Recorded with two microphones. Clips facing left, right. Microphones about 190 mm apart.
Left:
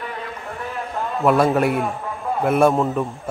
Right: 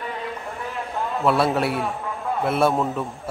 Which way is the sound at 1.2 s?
10° left (ahead or behind).